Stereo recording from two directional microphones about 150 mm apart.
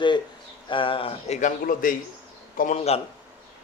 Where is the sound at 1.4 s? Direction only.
65° left (ahead or behind).